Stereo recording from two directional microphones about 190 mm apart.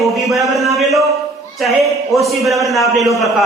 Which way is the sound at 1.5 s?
Centre (ahead or behind).